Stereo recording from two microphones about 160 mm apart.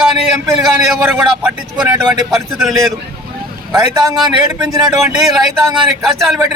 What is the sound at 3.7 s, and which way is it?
Speech, 20° right (ahead or behind).